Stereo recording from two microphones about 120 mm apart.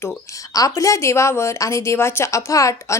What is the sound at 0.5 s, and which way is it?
Speech, 30° left (ahead or behind).